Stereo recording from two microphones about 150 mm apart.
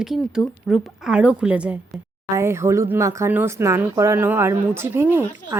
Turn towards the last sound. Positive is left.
turn(degrees=-15)  # may be behind; listen again after turning